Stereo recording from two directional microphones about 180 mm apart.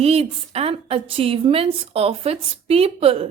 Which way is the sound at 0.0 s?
35° right (ahead or behind).